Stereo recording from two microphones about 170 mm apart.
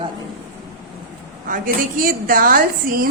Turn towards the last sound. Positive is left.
turn(degrees=-55)  # may be behind; listen again after turning